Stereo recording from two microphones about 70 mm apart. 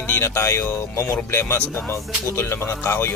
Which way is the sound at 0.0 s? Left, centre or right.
Left.